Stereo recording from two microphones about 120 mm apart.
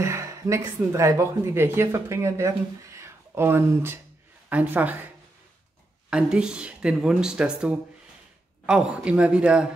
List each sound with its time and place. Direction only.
0.0 s speech: 25° right (ahead or behind)
6.0 s speech: 10° right (ahead or behind)